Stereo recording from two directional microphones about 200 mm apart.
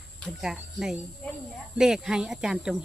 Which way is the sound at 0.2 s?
5° right (ahead or behind).